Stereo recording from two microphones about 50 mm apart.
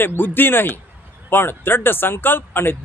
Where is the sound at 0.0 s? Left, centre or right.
Left.